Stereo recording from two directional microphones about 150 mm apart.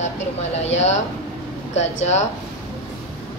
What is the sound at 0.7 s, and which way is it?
Speech, 50° left (ahead or behind).